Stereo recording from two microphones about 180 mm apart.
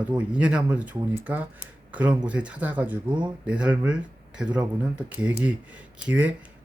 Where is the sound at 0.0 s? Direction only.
5° right (ahead or behind).